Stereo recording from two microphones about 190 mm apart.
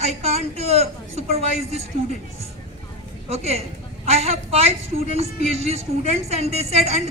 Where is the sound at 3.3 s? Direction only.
35° right (ahead or behind).